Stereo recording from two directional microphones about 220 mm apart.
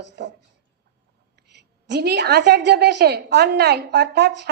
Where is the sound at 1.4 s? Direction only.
50° right (ahead or behind).